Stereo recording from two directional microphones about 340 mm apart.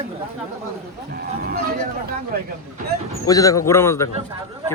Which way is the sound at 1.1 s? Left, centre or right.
Right.